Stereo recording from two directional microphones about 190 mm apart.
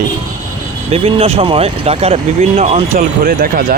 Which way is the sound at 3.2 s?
50° right (ahead or behind).